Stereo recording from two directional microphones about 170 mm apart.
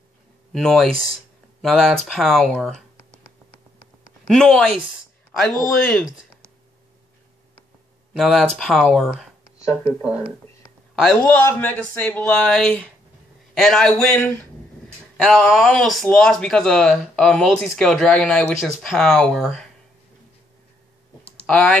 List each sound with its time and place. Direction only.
0.5 s speech: centre (ahead or behind)
4.3 s speech: 5° left (ahead or behind)
8.2 s speech: centre (ahead or behind)
11.0 s speech: 5° left (ahead or behind)
21.2 s clicking: 35° left (ahead or behind)
21.5 s speech: 5° left (ahead or behind)